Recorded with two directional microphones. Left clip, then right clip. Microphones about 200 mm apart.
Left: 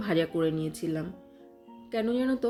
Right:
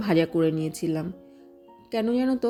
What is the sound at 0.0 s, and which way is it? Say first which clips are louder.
A woman's voice: right 5 dB; 35° right (ahead or behind).